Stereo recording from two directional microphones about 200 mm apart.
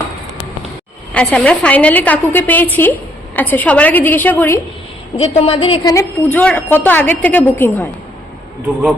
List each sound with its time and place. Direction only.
1.1 s a woman's voice: 5° left (ahead or behind)
5.1 s a woman's voice: 30° left (ahead or behind)
6.3 s a woman's voice: 5° left (ahead or behind)